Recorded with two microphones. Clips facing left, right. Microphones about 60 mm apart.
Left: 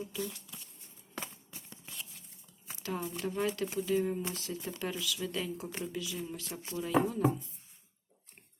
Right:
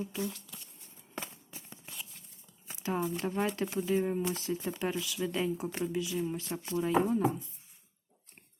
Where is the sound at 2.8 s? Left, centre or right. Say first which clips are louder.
Right 4 dB; right.